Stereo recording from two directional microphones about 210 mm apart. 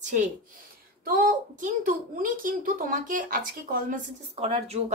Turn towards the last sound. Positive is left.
turn(degrees=-30)  # may be behind; listen again after turning